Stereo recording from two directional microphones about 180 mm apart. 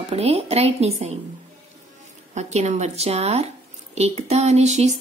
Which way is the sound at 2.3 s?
40° right (ahead or behind).